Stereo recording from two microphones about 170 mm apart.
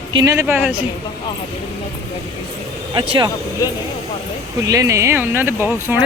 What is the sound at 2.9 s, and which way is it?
Speech, 30° right (ahead or behind).